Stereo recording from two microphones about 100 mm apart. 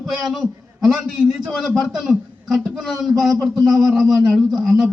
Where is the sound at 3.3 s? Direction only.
35° right (ahead or behind).